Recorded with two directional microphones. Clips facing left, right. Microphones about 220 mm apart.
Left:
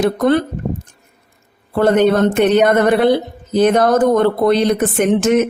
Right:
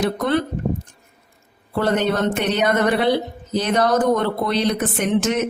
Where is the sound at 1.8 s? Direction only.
50° left (ahead or behind).